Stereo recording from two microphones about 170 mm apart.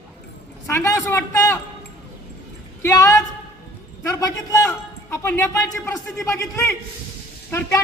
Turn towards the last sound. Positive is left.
turn(degrees=15)  # may be behind; listen again after turning